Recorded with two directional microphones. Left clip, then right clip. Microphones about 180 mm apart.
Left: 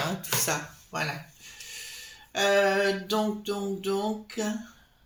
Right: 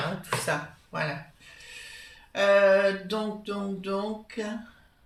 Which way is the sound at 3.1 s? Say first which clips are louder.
Left 3 dB; 40° left (ahead or behind).